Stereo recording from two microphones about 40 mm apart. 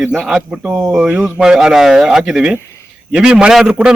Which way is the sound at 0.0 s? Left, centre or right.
Centre.